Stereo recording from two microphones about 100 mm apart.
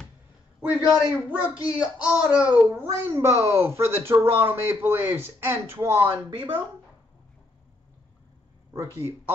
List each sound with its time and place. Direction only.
0.7 s a man's voice: 5° right (ahead or behind)
2.7 s speech: 25° right (ahead or behind)
8.9 s speech: 20° right (ahead or behind)